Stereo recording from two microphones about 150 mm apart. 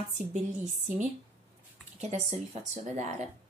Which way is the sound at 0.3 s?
55° right (ahead or behind).